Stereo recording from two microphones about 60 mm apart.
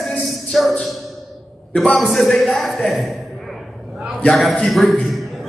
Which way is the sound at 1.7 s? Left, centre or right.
Centre.